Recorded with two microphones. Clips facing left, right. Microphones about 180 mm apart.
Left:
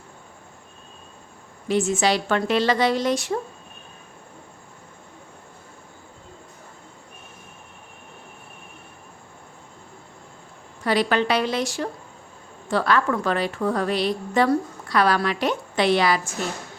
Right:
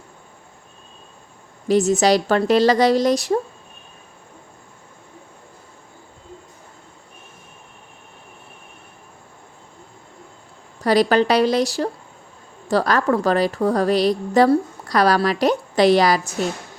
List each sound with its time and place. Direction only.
1.6 s a woman's voice: 40° right (ahead or behind)
10.8 s a woman's voice: 40° right (ahead or behind)